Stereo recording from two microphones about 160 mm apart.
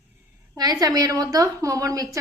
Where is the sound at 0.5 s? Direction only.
25° right (ahead or behind).